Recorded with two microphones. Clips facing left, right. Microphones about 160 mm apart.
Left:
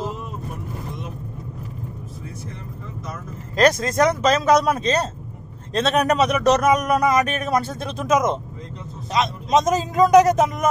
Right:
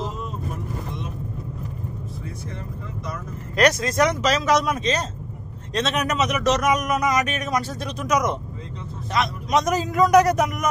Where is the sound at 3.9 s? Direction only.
45° left (ahead or behind).